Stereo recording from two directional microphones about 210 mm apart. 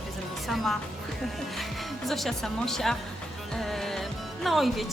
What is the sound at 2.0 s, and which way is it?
Speech, centre (ahead or behind).